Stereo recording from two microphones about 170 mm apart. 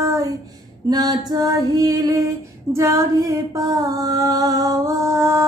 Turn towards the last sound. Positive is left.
turn(degrees=-15)  # may be behind; listen again after turning